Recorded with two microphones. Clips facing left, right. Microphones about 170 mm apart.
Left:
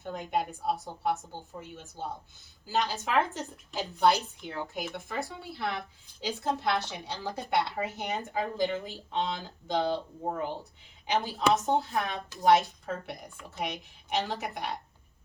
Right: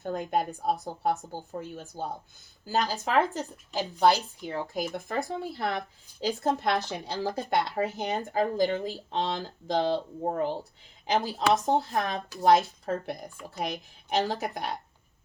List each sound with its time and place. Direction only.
0.0 s speech: 40° right (ahead or behind)